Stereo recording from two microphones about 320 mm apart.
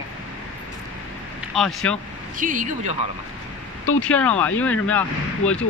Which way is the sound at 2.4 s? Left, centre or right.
Right.